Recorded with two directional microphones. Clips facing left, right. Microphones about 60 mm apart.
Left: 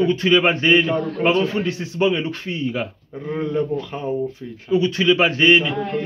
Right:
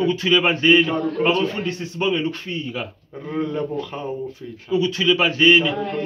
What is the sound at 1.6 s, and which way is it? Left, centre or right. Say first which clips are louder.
Speech: left 3 dB; left.